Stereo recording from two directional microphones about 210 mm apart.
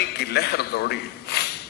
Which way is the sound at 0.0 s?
50° left (ahead or behind).